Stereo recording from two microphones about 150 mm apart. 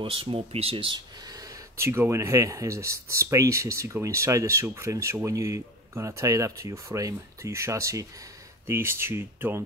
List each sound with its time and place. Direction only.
0.0 s speech: 35° right (ahead or behind); by 9.6 s 15° right (ahead or behind)